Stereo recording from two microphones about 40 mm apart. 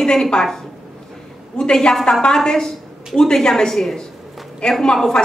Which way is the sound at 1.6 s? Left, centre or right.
Centre.